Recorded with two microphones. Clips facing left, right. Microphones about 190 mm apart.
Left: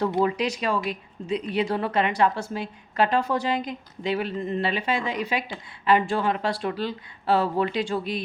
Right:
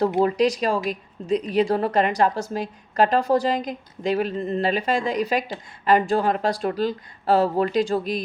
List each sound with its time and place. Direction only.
0.3 s a woman's voice: 40° right (ahead or behind)